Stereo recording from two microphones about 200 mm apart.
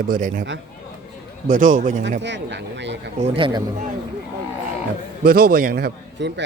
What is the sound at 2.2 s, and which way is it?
Speech, 60° right (ahead or behind).